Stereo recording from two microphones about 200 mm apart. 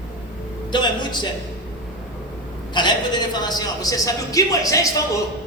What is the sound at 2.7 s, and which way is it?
Speech, 20° left (ahead or behind).